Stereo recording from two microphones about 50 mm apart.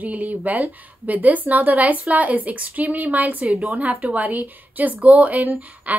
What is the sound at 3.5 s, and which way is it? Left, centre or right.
Speech, centre.